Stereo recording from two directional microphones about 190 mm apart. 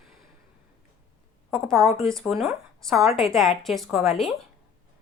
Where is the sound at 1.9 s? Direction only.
Centre (ahead or behind).